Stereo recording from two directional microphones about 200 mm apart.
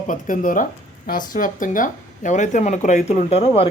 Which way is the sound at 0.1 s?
40° left (ahead or behind).